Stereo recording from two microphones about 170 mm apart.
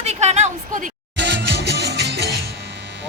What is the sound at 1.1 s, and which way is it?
Music, 90° right.